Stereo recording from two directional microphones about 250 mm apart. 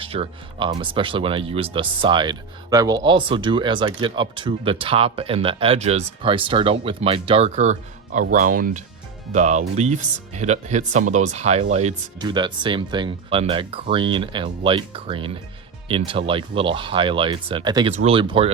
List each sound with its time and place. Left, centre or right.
0.0 s speech: right